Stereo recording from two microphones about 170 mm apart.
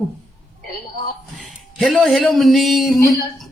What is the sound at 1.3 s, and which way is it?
Speech, centre (ahead or behind).